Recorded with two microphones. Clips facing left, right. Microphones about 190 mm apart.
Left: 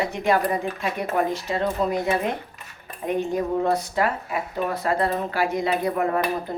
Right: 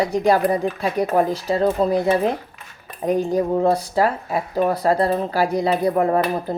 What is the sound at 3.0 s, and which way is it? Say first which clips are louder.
Speech: right 5 dB; 35° right (ahead or behind).